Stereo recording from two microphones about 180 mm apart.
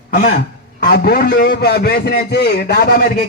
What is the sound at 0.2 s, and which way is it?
A man's voice, 55° left (ahead or behind).